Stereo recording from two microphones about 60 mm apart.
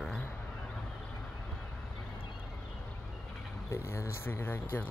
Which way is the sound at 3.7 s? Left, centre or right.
Left.